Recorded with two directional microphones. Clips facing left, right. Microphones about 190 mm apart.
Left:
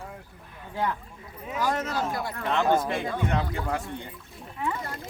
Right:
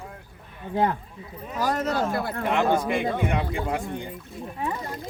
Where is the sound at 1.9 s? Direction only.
60° right (ahead or behind).